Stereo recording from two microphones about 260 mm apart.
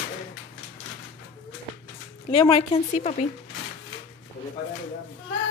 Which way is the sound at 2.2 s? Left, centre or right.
Centre.